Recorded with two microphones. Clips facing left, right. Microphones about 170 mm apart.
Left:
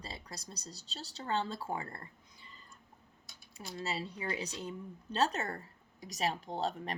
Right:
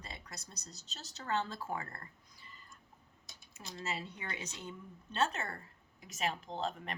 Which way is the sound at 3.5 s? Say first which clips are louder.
Left 3 dB; 35° left (ahead or behind).